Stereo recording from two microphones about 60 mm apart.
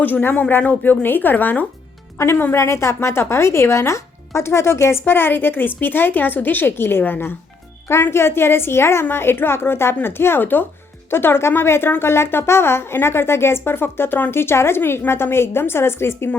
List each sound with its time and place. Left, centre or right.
0.0 s a woman's voice: left
2.1 s a woman's voice: left